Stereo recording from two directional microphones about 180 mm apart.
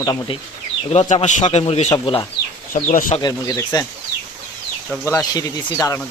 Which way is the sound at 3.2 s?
20° left (ahead or behind).